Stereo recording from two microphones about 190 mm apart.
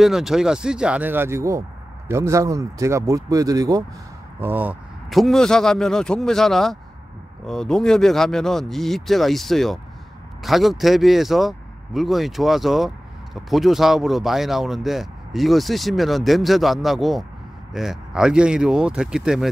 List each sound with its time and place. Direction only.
0.0 s speech: centre (ahead or behind)